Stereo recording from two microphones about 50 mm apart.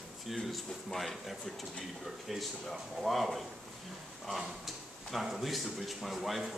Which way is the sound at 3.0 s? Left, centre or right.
Centre.